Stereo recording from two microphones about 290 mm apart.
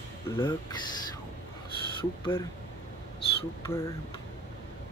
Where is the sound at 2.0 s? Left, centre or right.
Centre.